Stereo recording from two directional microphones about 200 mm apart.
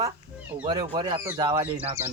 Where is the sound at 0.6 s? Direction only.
25° right (ahead or behind).